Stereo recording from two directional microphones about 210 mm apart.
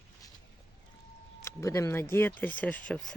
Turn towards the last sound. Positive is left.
turn(degrees=5)  # may be behind; listen again after turning